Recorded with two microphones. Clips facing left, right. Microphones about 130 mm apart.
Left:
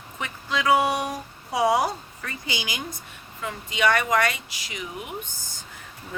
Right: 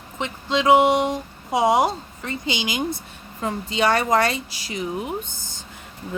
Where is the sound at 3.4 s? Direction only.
30° right (ahead or behind).